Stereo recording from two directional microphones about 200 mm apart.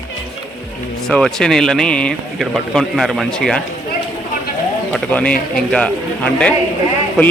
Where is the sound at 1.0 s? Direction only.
Centre (ahead or behind).